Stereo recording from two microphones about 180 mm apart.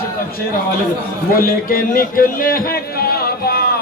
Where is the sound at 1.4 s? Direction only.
55° left (ahead or behind).